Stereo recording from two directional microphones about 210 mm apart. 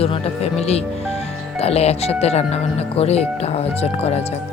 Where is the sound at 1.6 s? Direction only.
30° left (ahead or behind).